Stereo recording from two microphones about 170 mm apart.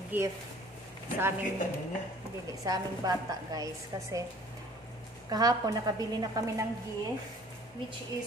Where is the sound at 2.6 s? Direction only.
20° right (ahead or behind).